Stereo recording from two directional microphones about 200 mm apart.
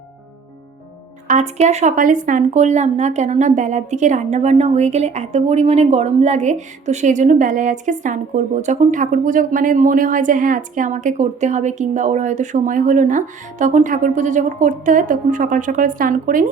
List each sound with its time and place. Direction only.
1.3 s speech: 35° right (ahead or behind)